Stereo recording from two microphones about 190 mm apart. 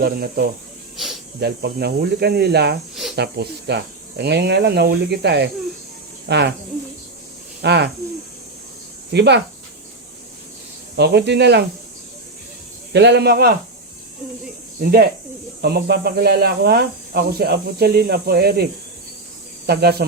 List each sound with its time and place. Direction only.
0.0 s speech: 55° right (ahead or behind)
2.9 s a sound: centre (ahead or behind)
3.2 s speech: 60° right (ahead or behind)
7.6 s speech: 60° right (ahead or behind)
9.1 s speech: 60° right (ahead or behind)
10.9 s speech: 60° right (ahead or behind)
12.9 s speech: 60° right (ahead or behind)
14.8 s speech: 50° right (ahead or behind)